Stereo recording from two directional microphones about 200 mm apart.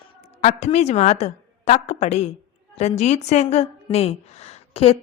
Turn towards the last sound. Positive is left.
turn(degrees=30)  # may be behind; listen again after turning